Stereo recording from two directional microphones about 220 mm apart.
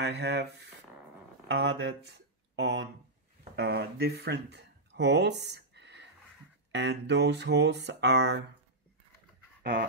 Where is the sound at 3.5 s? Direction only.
50° right (ahead or behind).